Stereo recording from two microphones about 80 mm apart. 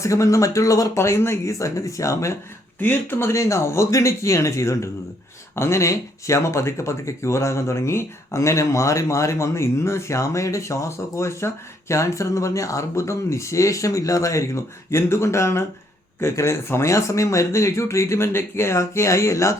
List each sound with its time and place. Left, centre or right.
0.0 s speech: left
2.8 s speech: left